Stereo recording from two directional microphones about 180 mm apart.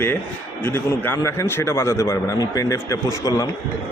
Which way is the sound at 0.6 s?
10° left (ahead or behind).